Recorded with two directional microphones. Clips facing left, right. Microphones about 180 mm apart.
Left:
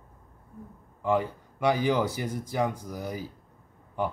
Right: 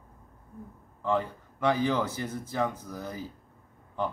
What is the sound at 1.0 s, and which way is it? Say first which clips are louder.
A man's voice: left 2 dB; 15° left (ahead or behind).